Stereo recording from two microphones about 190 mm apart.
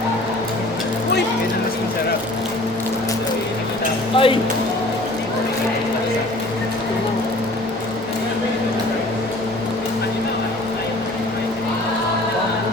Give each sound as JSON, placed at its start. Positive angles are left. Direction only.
{"t": 4.1, "sound": "speech", "side_deg": 30}